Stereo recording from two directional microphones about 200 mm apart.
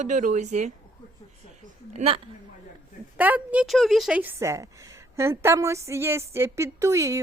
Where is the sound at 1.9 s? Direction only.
30° right (ahead or behind).